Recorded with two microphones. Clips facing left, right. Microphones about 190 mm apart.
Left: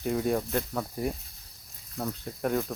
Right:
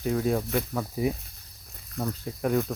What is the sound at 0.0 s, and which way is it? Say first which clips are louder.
Speech: right 1 dB; centre (ahead or behind).